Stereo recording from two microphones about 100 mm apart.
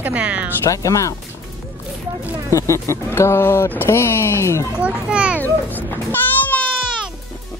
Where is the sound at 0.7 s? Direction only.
35° left (ahead or behind).